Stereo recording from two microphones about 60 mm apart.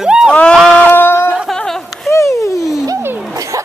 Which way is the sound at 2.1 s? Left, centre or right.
Left.